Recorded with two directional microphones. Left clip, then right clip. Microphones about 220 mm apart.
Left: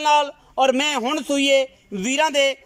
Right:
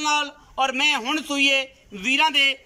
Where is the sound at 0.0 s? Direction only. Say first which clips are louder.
Left 5 dB; 35° left (ahead or behind).